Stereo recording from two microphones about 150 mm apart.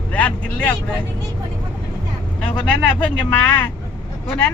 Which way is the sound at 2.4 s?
5° left (ahead or behind).